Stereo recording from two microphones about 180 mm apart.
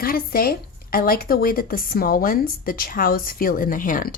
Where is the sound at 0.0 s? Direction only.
55° left (ahead or behind).